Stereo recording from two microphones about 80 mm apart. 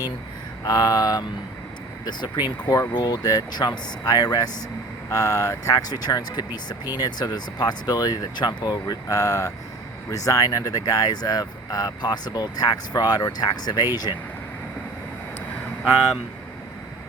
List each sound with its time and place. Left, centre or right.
0.6 s speech: left
2.0 s speech: left